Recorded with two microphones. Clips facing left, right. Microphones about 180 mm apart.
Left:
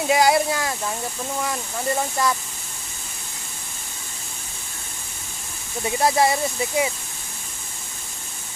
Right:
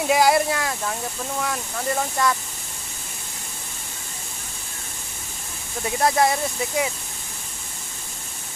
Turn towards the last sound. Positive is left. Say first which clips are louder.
# left 2 dB
turn(degrees=5)  # may be behind; listen again after turning